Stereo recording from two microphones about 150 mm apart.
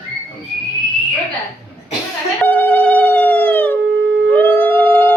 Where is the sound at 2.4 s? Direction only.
10° left (ahead or behind).